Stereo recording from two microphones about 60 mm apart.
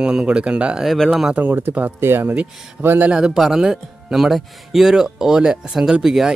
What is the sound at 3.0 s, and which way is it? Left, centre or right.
Speech, centre.